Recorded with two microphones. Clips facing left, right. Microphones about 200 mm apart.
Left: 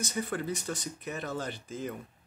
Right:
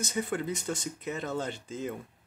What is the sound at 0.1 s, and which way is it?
Speech, 20° right (ahead or behind).